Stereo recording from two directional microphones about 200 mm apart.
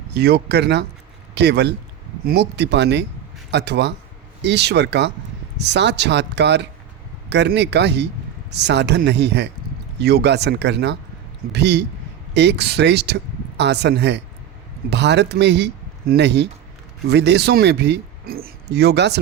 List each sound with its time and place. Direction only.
0.1 s speech: 55° right (ahead or behind)